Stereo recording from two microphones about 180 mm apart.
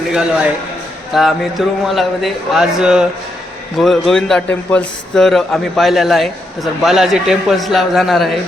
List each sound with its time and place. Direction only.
1.1 s a man's voice: centre (ahead or behind)